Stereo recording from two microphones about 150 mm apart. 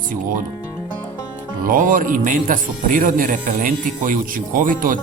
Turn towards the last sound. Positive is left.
turn(degrees=-65)  # may be behind; listen again after turning